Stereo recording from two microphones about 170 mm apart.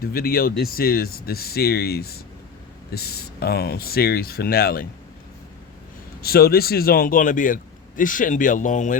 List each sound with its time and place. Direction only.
0.0 s speech: 60° left (ahead or behind)
6.2 s a man's voice: 65° left (ahead or behind); by 9.0 s 45° left (ahead or behind)